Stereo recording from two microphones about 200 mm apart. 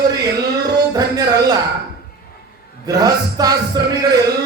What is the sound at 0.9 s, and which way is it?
Music, 20° right (ahead or behind).